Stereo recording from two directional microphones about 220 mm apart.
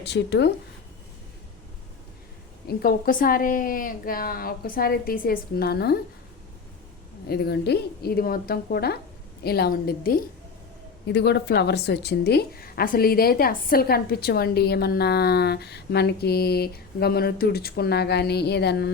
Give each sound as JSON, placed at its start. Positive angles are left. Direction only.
{"t": 0.0, "sound": "a woman's voice", "side_deg": 50}
{"t": 2.6, "sound": "a woman's voice", "side_deg": 40}
{"t": 7.3, "sound": "a woman's voice", "side_deg": 45}